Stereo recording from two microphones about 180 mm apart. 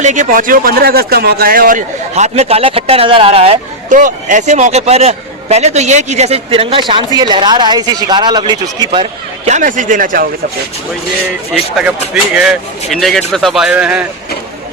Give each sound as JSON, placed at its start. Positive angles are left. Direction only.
{"t": 0.0, "sound": "speech", "side_deg": -45}
{"t": 3.9, "sound": "a man's voice", "side_deg": -45}
{"t": 9.5, "sound": "speech", "side_deg": -45}
{"t": 11.8, "sound": "speech", "side_deg": -5}